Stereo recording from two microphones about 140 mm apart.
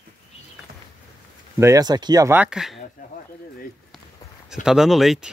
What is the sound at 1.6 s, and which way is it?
Speech, 25° right (ahead or behind).